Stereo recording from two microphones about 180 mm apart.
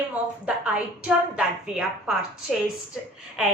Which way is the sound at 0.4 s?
5° right (ahead or behind).